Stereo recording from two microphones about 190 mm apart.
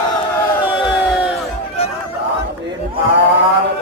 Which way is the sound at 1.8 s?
30° left (ahead or behind).